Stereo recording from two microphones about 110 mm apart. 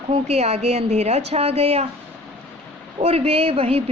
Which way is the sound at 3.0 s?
70° right (ahead or behind).